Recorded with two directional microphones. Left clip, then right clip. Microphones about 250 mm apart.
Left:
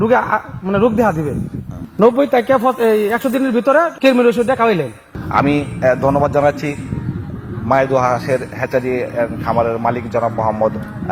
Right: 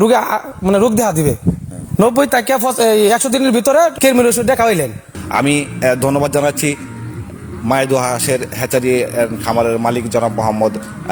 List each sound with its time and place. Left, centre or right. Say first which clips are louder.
0.0 s a woman's voice: right 1 dB; right
2.2 s a man's voice: even; right
2.5 s a woman's voice: even; right
9.8 s a man's voice: right 2 dB; right